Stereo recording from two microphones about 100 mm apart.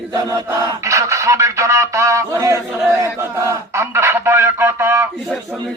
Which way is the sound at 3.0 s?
25° right (ahead or behind).